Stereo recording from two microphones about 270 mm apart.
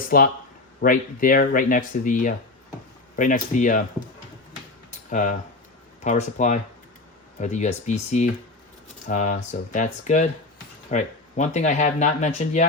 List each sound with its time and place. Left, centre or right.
0.1 s speech: left
4.9 s a sound: left
6.0 s speech: left